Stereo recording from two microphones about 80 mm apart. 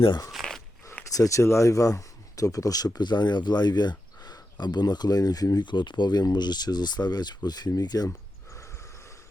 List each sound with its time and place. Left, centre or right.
0.3 s zipper: centre
1.1 s speech: left
5.6 s speech: left